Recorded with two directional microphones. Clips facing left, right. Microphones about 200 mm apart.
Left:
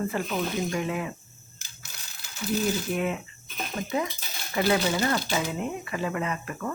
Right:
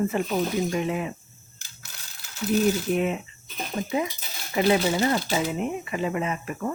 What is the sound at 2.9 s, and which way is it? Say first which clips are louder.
Speech: right 3 dB; 20° right (ahead or behind).